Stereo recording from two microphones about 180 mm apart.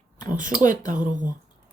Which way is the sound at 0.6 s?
45° right (ahead or behind).